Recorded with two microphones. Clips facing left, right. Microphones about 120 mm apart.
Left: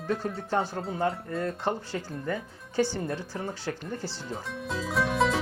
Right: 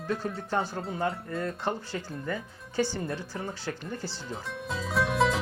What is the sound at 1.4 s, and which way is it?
Speech, 35° left (ahead or behind).